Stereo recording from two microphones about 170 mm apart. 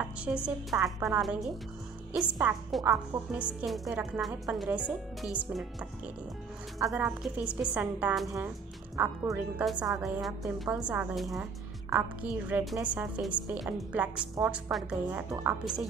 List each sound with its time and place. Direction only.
0.0 s a woman's voice: 5° right (ahead or behind)
6.8 s a woman's voice: 15° right (ahead or behind)
8.9 s a woman's voice: 15° right (ahead or behind)
9.7 s a woman's voice: centre (ahead or behind)
12.4 s a woman's voice: 10° right (ahead or behind)